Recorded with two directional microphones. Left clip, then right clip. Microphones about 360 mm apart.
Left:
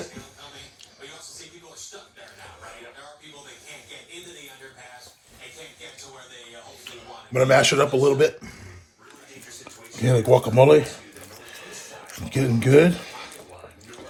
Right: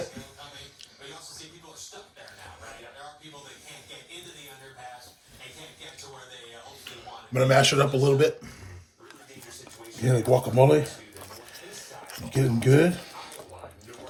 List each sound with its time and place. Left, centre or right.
7.3 s speech: centre
10.0 s speech: left
12.3 s speech: centre